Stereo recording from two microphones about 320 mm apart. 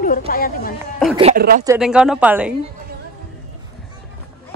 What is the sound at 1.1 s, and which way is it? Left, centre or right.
Speech, centre.